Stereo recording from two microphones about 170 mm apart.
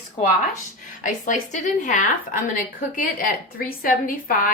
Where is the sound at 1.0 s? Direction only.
50° left (ahead or behind).